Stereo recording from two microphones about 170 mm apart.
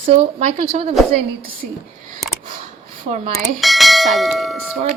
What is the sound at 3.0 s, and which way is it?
Speech, 40° right (ahead or behind).